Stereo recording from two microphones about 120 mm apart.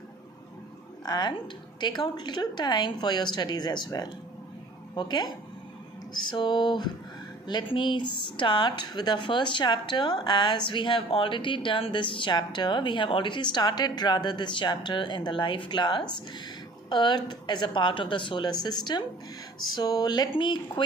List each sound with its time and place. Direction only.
1.0 s speech: 35° left (ahead or behind)